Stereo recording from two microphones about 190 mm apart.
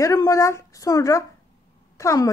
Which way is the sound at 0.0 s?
20° left (ahead or behind).